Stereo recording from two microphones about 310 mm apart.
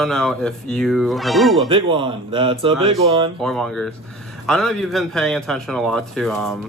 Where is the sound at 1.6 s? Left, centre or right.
Centre.